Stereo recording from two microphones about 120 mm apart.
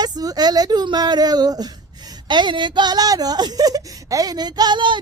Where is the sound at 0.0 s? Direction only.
35° right (ahead or behind).